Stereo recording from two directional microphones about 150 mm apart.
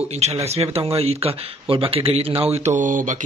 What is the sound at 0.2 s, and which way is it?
Speech, 45° right (ahead or behind).